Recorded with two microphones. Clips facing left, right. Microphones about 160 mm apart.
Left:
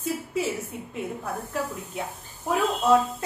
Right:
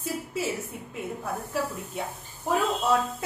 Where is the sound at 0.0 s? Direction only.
Centre (ahead or behind).